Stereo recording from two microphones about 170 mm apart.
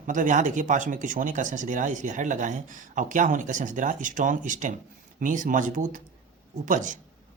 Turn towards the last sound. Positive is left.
turn(degrees=-50)  # may be behind; listen again after turning